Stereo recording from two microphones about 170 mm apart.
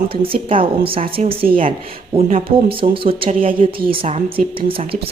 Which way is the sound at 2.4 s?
30° right (ahead or behind).